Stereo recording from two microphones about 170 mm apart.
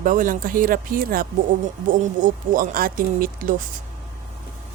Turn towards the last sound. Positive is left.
turn(degrees=-50)  # may be behind; listen again after turning